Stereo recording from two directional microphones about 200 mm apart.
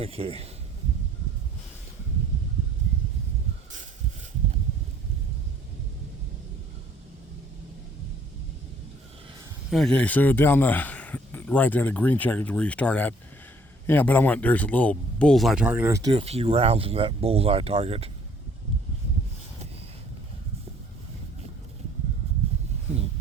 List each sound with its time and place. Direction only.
0.0 s speech: 30° right (ahead or behind)
9.6 s a man's voice: centre (ahead or behind); by 18.1 s 30° right (ahead or behind)